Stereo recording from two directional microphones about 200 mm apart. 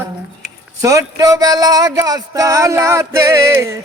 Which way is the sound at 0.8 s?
15° right (ahead or behind).